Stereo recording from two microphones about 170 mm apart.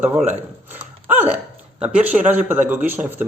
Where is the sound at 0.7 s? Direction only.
10° right (ahead or behind).